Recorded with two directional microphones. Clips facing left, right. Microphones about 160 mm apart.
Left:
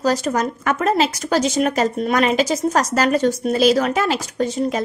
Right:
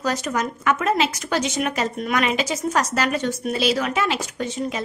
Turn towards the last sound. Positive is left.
turn(degrees=40)  # may be behind; listen again after turning